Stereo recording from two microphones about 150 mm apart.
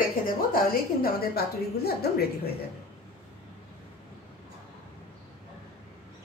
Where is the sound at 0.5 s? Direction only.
75° left (ahead or behind).